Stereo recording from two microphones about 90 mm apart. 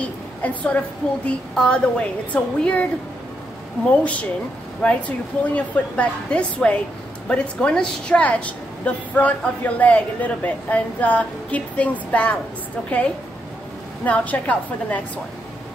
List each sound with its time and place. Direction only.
0.0 s a sound: 15° left (ahead or behind)
1.2 s a woman's voice: 10° left (ahead or behind)
14.0 s a woman's voice: 15° left (ahead or behind)